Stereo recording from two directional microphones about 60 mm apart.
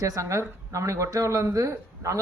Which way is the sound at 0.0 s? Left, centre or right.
Right.